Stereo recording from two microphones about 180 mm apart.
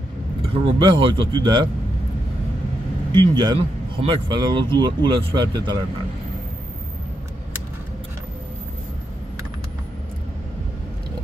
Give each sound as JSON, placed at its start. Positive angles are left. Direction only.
{"t": 0.5, "sound": "speech", "side_deg": -25}
{"t": 3.1, "sound": "speech", "side_deg": -25}